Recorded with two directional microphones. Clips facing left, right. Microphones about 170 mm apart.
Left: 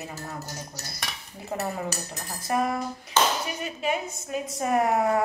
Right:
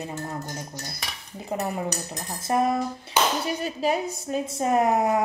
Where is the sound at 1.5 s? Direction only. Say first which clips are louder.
Right 2 dB; 15° right (ahead or behind).